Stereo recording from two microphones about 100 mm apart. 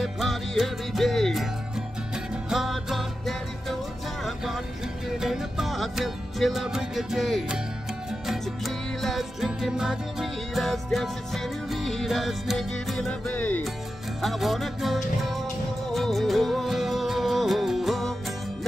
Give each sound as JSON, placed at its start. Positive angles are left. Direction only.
{"t": 0.0, "sound": "music", "side_deg": 0}
{"t": 2.5, "sound": "music", "side_deg": 0}
{"t": 5.2, "sound": "music", "side_deg": -5}
{"t": 13.3, "sound": "music", "side_deg": 15}
{"t": 14.2, "sound": "music", "side_deg": 0}